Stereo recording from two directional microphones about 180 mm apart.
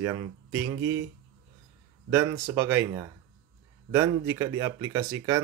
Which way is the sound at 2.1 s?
15° right (ahead or behind).